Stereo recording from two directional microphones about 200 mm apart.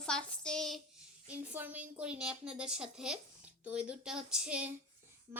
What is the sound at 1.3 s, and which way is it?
A woman's voice, 10° right (ahead or behind).